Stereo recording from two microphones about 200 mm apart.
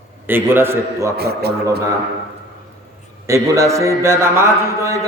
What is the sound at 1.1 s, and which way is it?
Speech, 55° right (ahead or behind).